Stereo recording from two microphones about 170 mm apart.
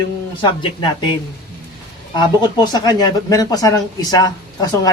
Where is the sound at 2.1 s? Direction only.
25° left (ahead or behind).